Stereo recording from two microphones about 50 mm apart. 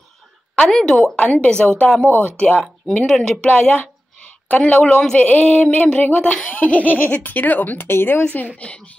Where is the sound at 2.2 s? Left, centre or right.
Left.